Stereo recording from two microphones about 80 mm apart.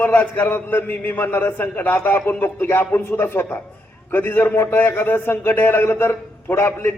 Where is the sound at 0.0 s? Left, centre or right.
Left.